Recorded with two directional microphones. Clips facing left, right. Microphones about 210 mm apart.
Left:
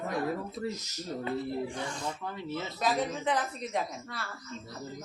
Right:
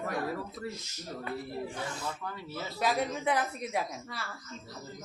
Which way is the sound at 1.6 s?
5° right (ahead or behind).